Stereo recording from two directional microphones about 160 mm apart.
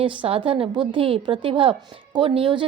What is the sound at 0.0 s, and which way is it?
A woman's voice, 35° right (ahead or behind).